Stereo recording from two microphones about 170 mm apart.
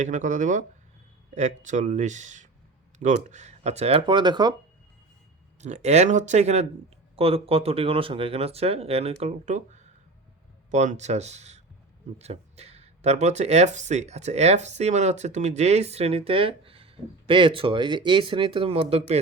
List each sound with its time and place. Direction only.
0.0 s speech: 45° right (ahead or behind); by 4.5 s 25° right (ahead or behind)
5.5 s speech: 40° right (ahead or behind)
10.7 s speech: 45° right (ahead or behind)